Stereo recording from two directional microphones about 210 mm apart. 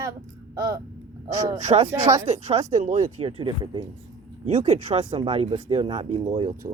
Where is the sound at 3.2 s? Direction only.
25° right (ahead or behind).